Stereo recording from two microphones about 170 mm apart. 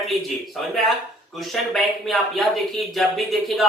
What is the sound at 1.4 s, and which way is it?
Speech, centre (ahead or behind).